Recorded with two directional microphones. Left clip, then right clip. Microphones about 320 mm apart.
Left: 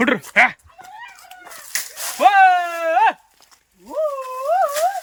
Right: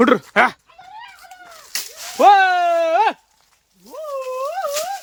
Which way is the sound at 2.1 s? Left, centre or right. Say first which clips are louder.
Right 1 dB; centre.